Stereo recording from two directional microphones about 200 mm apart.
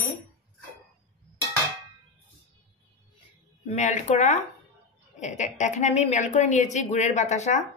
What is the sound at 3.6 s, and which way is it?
A woman's voice, 35° left (ahead or behind).